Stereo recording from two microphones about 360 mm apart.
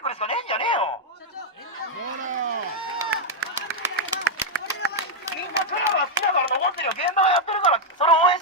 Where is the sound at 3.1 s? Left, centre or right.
Right.